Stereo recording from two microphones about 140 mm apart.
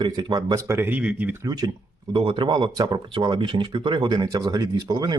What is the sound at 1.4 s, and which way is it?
Speech, 25° right (ahead or behind).